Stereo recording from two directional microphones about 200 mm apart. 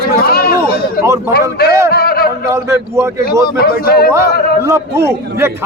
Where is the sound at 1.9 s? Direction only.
50° left (ahead or behind).